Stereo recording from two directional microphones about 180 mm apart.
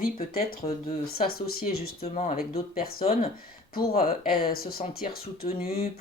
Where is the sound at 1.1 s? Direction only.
55° left (ahead or behind).